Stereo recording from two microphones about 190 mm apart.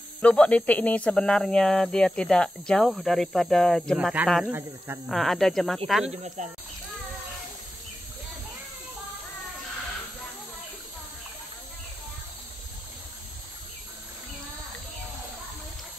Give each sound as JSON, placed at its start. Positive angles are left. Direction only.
{"t": 0.2, "sound": "speech", "side_deg": 5}
{"t": 5.0, "sound": "speech", "side_deg": 0}
{"t": 6.0, "sound": "speech", "side_deg": -35}